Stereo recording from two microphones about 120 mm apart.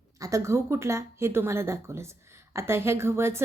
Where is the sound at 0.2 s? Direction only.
25° right (ahead or behind).